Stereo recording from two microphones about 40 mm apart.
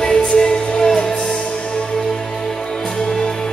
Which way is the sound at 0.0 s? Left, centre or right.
Centre.